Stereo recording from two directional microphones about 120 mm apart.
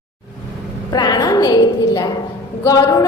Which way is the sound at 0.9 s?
35° left (ahead or behind).